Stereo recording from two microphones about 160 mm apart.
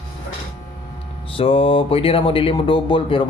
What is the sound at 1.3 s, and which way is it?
Speech, 35° left (ahead or behind).